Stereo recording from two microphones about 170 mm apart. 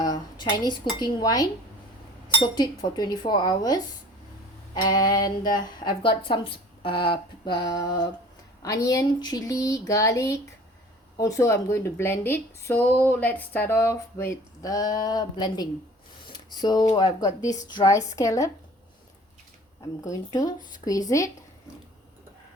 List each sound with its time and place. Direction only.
0.0 s dishes: 25° left (ahead or behind)
0.9 s a woman's voice: 25° left (ahead or behind)
20.1 s speech: 25° left (ahead or behind)